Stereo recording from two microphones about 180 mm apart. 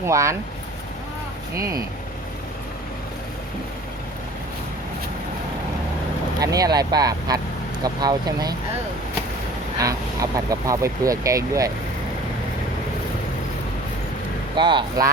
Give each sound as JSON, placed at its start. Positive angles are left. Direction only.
{"t": 0.0, "sound": "speech", "side_deg": -15}
{"t": 1.5, "sound": "speech", "side_deg": -15}
{"t": 6.4, "sound": "speech", "side_deg": -20}
{"t": 9.8, "sound": "speech", "side_deg": -20}
{"t": 14.5, "sound": "speech", "side_deg": -25}